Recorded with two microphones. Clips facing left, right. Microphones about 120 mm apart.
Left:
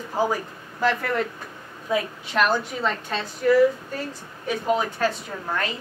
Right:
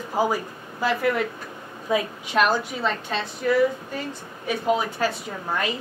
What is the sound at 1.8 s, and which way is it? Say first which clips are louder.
Speech: right 1 dB; 20° right (ahead or behind).